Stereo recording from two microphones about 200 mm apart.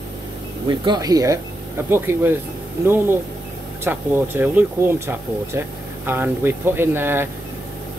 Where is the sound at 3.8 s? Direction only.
10° right (ahead or behind).